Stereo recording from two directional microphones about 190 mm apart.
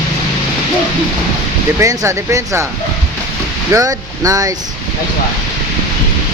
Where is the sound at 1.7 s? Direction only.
15° right (ahead or behind).